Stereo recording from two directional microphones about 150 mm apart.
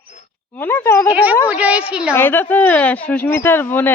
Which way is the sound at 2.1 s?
15° left (ahead or behind).